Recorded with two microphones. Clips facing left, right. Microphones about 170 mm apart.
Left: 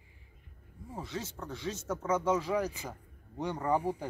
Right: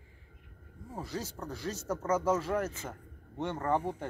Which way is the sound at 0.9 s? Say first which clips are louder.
Right 1 dB; 5° right (ahead or behind).